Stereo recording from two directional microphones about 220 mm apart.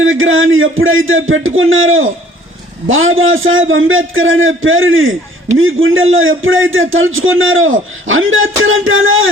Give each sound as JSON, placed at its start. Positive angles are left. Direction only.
{"t": 0.0, "sound": "a man's voice", "side_deg": -65}